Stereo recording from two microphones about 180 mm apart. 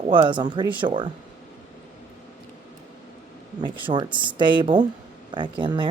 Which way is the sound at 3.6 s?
25° right (ahead or behind).